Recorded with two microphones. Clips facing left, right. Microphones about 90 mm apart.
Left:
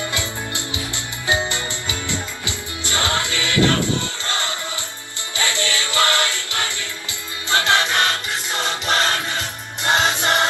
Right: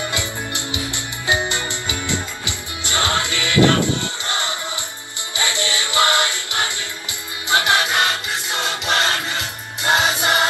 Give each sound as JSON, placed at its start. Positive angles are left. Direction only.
{"t": 0.1, "sound": "music", "side_deg": -20}
{"t": 7.4, "sound": "choir", "side_deg": -15}
{"t": 9.8, "sound": "music", "side_deg": -5}